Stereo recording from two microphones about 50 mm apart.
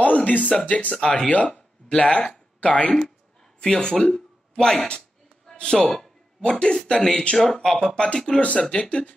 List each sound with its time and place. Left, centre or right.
0.0 s a sound: left
0.5 s speech: left
0.9 s speech: centre
2.0 s speech: left